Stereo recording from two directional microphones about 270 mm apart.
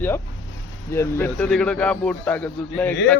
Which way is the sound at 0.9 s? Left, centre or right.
Centre.